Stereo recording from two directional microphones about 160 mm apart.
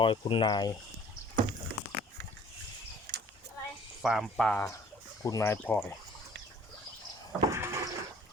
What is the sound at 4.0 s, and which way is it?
Speech, centre (ahead or behind).